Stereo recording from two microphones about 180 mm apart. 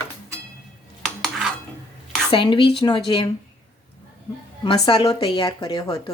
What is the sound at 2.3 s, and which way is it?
A woman's voice, 25° left (ahead or behind).